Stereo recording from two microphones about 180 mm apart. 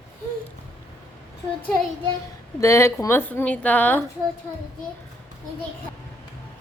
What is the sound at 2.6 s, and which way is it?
A woman's voice, 15° left (ahead or behind).